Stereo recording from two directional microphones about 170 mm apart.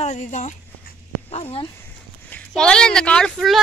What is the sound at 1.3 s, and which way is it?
Speech, 35° left (ahead or behind).